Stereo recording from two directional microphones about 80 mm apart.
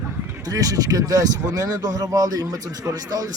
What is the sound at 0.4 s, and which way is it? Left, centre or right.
Speech, right.